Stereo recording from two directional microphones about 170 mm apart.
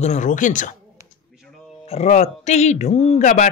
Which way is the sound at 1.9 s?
40° left (ahead or behind).